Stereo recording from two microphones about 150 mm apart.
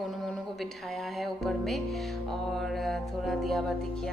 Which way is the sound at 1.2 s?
Centre (ahead or behind).